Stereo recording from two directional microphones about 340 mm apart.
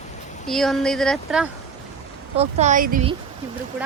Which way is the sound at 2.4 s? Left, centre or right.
Centre.